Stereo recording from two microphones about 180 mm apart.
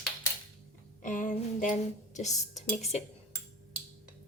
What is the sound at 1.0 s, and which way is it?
Music, 45° left (ahead or behind).